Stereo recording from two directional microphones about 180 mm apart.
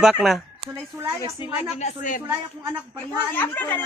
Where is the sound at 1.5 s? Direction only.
35° left (ahead or behind).